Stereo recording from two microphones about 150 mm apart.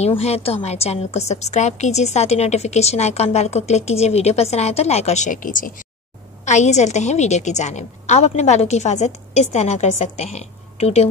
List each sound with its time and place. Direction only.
0.0 s a woman's voice: 45° left (ahead or behind)